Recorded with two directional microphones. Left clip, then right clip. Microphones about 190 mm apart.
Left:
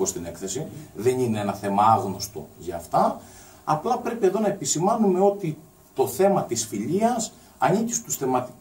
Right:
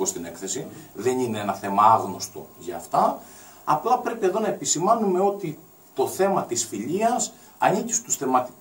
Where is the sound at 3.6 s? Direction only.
20° right (ahead or behind).